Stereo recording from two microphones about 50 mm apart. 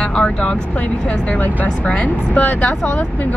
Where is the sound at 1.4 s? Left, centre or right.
Left.